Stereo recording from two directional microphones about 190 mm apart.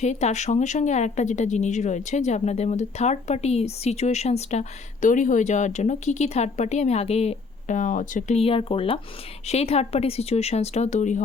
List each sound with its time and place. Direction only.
0.0 s speech: 35° left (ahead or behind)